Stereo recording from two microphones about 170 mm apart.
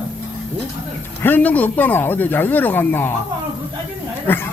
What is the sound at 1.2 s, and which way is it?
Speech, 10° left (ahead or behind).